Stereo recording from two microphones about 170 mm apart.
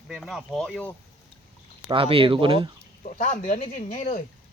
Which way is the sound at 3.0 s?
50° left (ahead or behind).